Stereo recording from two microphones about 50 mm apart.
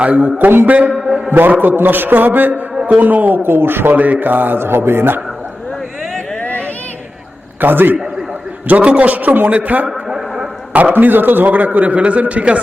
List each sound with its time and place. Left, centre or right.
0.0 s a man's voice: right
0.3 s a man's voice: right
2.5 s a man's voice: right
3.9 s a man's voice: right
7.6 s a man's voice: right
10.1 s a sound: centre
10.7 s a man's voice: right
10.9 s a man's voice: right